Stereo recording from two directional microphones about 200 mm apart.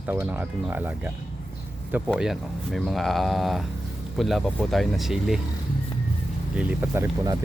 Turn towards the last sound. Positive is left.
turn(degrees=-15)  # may be behind; listen again after turning